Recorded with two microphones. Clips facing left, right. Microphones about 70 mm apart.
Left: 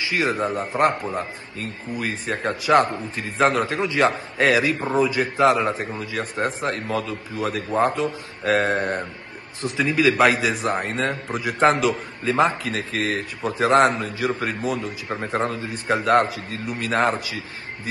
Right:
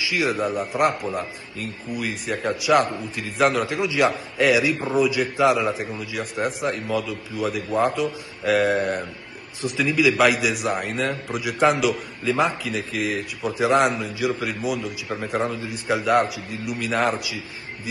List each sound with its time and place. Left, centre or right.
0.0 s a man's voice: left